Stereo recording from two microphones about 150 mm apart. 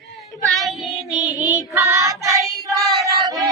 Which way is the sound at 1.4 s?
20° left (ahead or behind).